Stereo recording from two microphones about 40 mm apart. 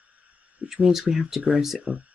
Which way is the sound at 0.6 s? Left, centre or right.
Centre.